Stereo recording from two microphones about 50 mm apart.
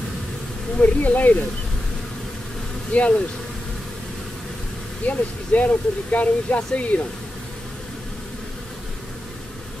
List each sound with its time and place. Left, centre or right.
0.7 s speech: left
2.9 s speech: left
5.0 s speech: left